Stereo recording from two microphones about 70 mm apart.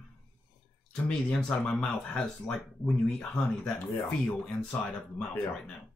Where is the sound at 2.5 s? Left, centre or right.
Left.